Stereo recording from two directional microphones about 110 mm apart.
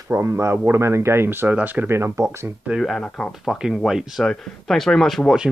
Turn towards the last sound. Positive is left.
turn(degrees=0)  # may be behind; listen again after turning